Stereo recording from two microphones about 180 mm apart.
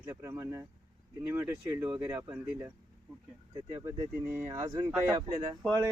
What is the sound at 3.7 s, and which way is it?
Speech, 15° right (ahead or behind).